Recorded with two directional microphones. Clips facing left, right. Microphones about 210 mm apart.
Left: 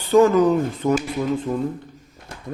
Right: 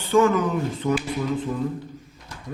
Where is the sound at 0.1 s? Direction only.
40° left (ahead or behind).